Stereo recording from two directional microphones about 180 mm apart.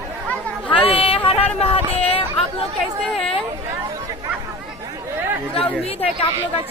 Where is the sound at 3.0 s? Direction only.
Centre (ahead or behind).